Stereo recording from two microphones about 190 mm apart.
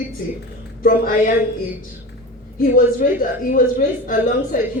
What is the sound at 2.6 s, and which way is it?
A woman's voice, 45° left (ahead or behind).